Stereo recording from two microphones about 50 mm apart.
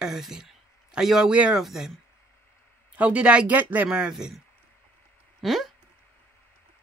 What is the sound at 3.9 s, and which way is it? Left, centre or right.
Speech, centre.